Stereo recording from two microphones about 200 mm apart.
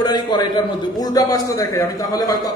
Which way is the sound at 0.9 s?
20° left (ahead or behind).